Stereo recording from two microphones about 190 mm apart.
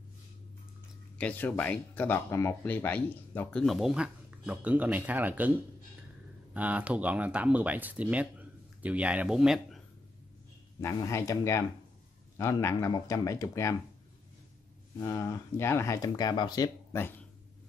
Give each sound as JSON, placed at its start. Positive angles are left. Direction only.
{"t": 1.1, "sound": "speech", "side_deg": 10}
{"t": 10.8, "sound": "speech", "side_deg": 15}
{"t": 15.0, "sound": "speech", "side_deg": 15}